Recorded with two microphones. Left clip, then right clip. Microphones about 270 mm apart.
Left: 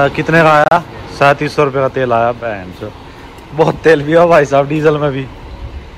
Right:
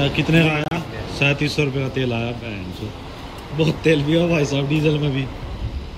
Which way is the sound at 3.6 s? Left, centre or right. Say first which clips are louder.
Left 9 dB; left.